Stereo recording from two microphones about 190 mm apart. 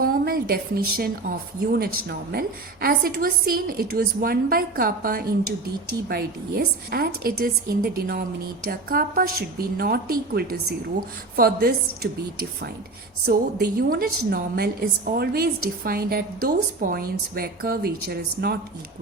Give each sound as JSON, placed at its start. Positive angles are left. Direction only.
{"t": 0.0, "sound": "a woman's voice", "side_deg": -55}
{"t": 13.2, "sound": "a woman's voice", "side_deg": -55}